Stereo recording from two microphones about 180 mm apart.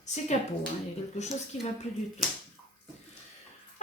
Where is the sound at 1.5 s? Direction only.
40° left (ahead or behind).